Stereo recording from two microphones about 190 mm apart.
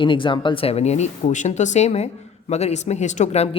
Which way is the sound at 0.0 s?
25° left (ahead or behind).